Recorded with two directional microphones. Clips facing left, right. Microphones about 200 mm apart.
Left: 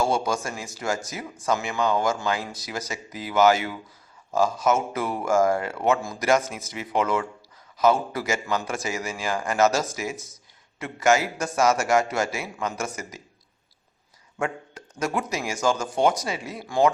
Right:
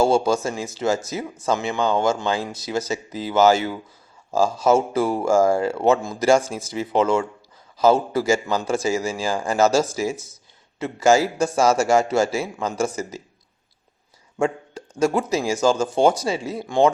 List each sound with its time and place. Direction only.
0.0 s speech: 25° right (ahead or behind)
14.3 s speech: 30° right (ahead or behind)